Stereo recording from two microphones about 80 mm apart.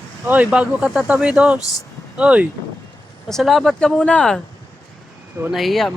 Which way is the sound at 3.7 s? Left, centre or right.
Centre.